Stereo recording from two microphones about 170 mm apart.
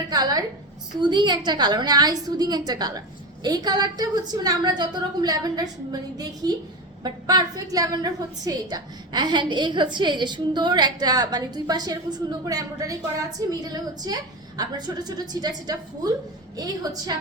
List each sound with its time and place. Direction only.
0.1 s a woman's voice: 25° right (ahead or behind)